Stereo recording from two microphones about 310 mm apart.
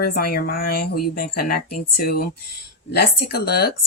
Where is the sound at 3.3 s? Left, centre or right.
Left.